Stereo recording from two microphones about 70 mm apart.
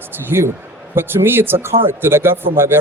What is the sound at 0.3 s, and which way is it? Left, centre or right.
A man's voice, right.